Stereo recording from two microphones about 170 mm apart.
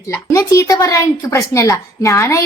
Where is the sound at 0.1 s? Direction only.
15° left (ahead or behind).